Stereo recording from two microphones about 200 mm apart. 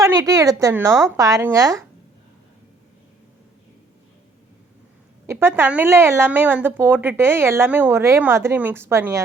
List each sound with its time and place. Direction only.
0.0 s a woman's voice: 15° right (ahead or behind)
5.2 s speech: 15° right (ahead or behind)